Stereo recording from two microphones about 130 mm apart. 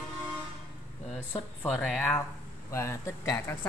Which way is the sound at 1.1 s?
10° left (ahead or behind).